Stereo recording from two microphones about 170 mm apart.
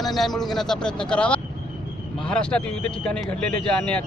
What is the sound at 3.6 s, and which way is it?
Speech, 5° left (ahead or behind).